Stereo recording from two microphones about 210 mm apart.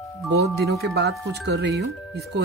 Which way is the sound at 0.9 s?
50° right (ahead or behind).